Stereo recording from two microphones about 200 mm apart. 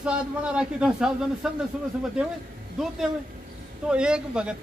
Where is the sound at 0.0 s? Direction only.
5° right (ahead or behind).